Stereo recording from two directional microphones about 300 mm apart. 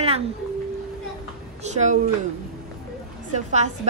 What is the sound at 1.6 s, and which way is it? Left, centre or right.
Speech, right.